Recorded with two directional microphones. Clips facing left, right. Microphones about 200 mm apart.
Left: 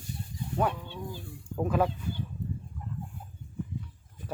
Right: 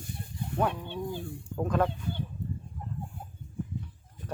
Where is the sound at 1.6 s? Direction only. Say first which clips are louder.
Left 1 dB; 5° left (ahead or behind).